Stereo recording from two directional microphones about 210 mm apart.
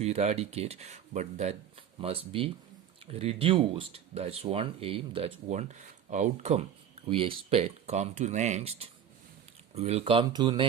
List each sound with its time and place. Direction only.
0.0 s speech: 30° right (ahead or behind)